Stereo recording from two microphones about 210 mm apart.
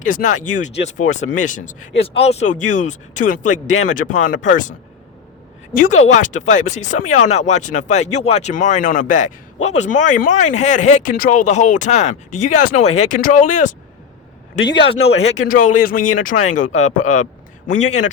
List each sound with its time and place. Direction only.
0.0 s speech: 40° left (ahead or behind)
5.7 s speech: 35° left (ahead or behind)
14.7 s speech: 25° left (ahead or behind)
15.4 s speech: 40° left (ahead or behind)